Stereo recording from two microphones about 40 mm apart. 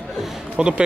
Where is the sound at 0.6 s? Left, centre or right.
Right.